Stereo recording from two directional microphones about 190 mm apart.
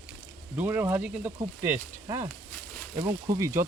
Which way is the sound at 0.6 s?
10° right (ahead or behind).